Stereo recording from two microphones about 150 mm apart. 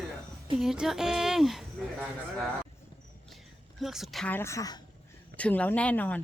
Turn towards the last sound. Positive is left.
turn(degrees=10)  # may be behind; listen again after turning